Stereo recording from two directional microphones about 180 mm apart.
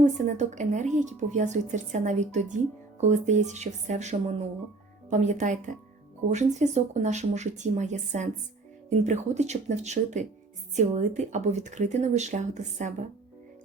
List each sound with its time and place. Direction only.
0.0 s speech: 40° right (ahead or behind)